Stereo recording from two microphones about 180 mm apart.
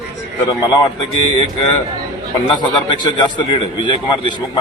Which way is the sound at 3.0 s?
25° left (ahead or behind).